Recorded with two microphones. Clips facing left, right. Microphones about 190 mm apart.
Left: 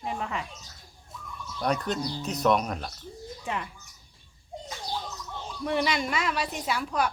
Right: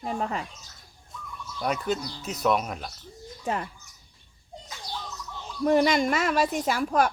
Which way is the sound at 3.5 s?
40° right (ahead or behind).